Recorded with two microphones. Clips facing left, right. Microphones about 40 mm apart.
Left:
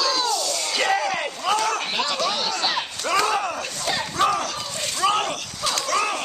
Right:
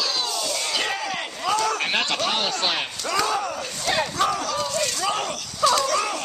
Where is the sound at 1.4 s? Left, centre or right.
Centre.